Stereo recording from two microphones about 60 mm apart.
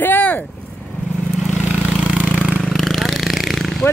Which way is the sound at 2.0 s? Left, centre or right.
Right.